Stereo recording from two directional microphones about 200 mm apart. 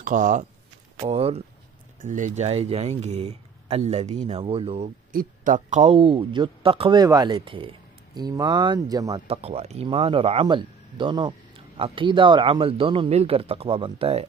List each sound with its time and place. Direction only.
0.0 s speech: 40° right (ahead or behind)
5.1 s speech: 40° right (ahead or behind); by 9.4 s 20° right (ahead or behind)
9.4 s speech: 30° right (ahead or behind)